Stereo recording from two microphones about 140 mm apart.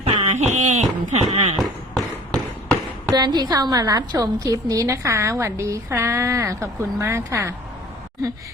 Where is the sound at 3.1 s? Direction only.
30° right (ahead or behind).